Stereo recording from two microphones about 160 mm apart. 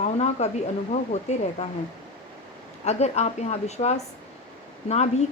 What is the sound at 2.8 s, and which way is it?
Speech, 45° left (ahead or behind).